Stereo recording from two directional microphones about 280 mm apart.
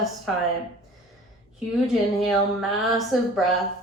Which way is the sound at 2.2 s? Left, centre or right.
Centre.